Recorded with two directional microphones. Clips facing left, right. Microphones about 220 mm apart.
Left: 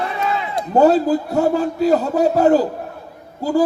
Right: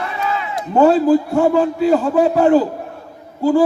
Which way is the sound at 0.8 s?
40° left (ahead or behind).